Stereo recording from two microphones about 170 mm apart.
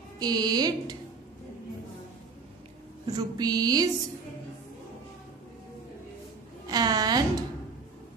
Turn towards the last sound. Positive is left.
turn(degrees=-20)  # may be behind; listen again after turning